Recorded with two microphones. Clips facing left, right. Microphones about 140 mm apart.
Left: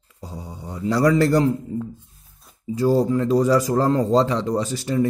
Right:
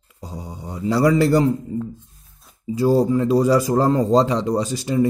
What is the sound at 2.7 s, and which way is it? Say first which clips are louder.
Speech: right 2 dB; 10° right (ahead or behind).